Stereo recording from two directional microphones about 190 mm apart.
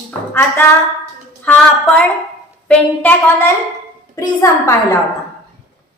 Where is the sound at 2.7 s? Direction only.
10° left (ahead or behind).